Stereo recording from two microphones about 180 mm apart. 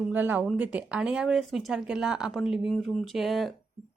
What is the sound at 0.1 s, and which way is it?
A woman's voice, 10° right (ahead or behind).